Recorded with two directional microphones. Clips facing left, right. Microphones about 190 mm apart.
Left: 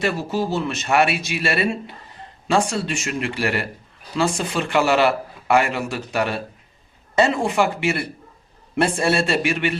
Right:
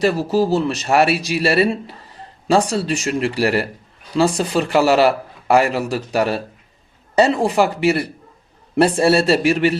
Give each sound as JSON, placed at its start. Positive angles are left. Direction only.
{"t": 0.0, "sound": "speech", "side_deg": -35}